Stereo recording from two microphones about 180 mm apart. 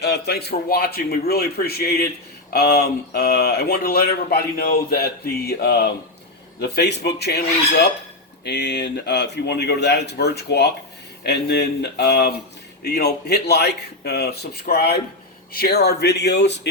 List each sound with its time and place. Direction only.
0.0 s a man's voice: 65° left (ahead or behind)